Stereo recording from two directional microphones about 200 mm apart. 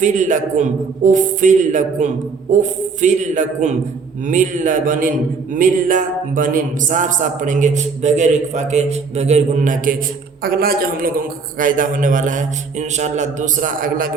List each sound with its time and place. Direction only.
0.0 s a man's voice: 40° right (ahead or behind)